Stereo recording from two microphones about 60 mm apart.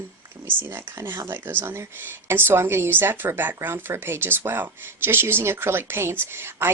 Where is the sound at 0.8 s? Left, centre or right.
Right.